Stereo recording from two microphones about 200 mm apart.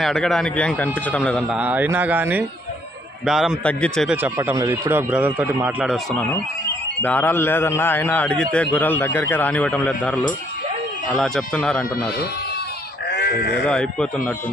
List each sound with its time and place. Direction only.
0.0 s a man's voice: centre (ahead or behind)
1.5 s a man's voice: 10° right (ahead or behind)
4.2 s a man's voice: 10° right (ahead or behind); by 11.9 s 5° left (ahead or behind)
13.1 s sheep: 55° left (ahead or behind)
13.7 s a man's voice: 5° left (ahead or behind)